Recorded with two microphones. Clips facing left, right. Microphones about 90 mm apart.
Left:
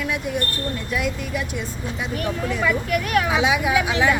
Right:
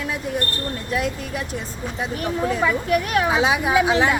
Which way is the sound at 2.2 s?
25° right (ahead or behind).